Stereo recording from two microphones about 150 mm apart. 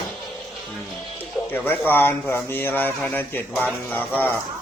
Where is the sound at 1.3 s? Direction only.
15° left (ahead or behind).